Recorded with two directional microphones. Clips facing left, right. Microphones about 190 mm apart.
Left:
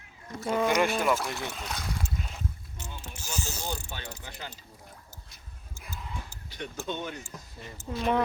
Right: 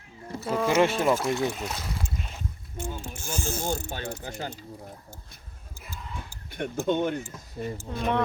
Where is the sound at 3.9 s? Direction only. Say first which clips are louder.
Right 7 dB; 45° right (ahead or behind).